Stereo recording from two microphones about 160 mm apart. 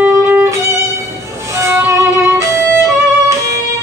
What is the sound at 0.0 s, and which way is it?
Music, 15° right (ahead or behind).